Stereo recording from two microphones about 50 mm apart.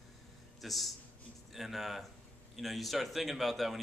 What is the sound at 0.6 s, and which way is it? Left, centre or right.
A man's voice, centre.